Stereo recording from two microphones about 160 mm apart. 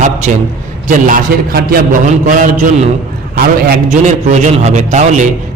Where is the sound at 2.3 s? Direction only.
55° right (ahead or behind).